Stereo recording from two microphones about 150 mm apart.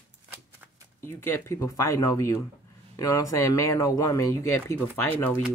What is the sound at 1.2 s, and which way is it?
Speech, 15° left (ahead or behind).